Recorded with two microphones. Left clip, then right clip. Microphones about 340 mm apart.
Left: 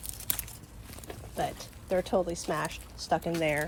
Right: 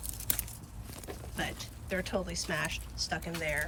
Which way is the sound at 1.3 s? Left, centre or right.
Centre.